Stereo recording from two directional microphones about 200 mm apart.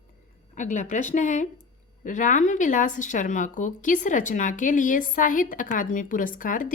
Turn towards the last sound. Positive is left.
turn(degrees=40)  # may be behind; listen again after turning